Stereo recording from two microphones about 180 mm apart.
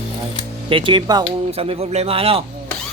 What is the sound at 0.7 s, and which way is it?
A man's voice, 30° right (ahead or behind).